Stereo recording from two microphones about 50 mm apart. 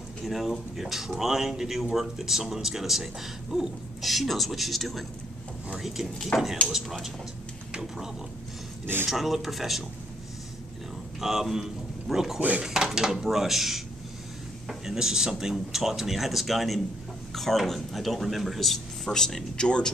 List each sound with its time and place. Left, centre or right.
0.2 s speech: centre
9.1 s speech: centre
11.1 s a man's voice: centre
12.4 s speech: right
12.6 s speech: centre